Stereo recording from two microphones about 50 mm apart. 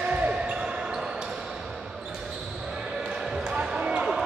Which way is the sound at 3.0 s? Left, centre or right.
Centre.